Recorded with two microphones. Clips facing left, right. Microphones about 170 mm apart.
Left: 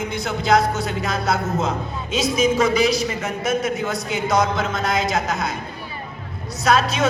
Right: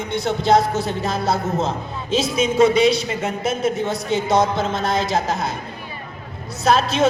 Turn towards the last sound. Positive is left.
turn(degrees=-30)  # may be behind; listen again after turning